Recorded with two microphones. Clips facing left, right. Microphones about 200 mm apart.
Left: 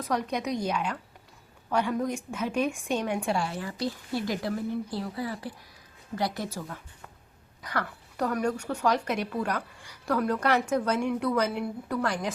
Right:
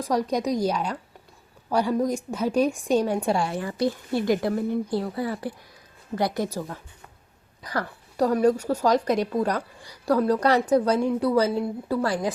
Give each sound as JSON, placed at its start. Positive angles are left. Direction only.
{"t": 0.0, "sound": "speech", "side_deg": -35}
{"t": 3.5, "sound": "speech", "side_deg": -50}
{"t": 6.4, "sound": "a woman's voice", "side_deg": -40}